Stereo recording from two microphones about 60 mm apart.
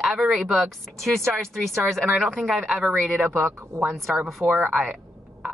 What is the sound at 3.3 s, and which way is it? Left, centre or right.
Speech, right.